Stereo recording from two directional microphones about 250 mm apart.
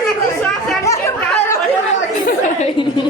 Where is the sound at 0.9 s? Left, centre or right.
Centre.